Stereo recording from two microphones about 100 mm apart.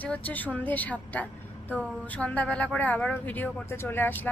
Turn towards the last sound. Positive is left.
turn(degrees=20)  # may be behind; listen again after turning